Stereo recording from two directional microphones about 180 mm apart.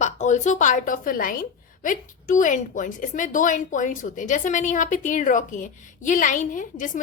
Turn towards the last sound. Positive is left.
turn(degrees=45)  # may be behind; listen again after turning